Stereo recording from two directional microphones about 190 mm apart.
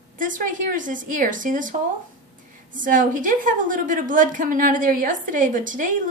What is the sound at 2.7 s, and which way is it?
A woman's voice, 45° right (ahead or behind).